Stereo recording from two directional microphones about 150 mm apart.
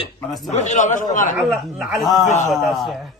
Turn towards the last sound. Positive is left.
turn(degrees=0)  # may be behind; listen again after turning